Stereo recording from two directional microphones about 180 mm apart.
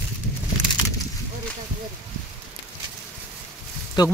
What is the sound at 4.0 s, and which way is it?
Speech, 25° left (ahead or behind).